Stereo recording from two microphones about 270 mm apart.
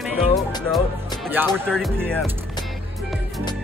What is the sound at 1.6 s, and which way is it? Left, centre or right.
Music, centre.